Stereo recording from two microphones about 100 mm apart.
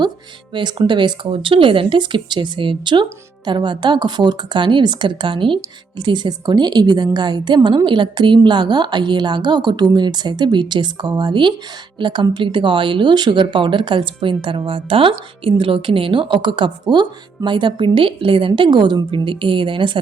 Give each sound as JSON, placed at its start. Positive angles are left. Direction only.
{"t": 0.5, "sound": "a woman's voice", "side_deg": -50}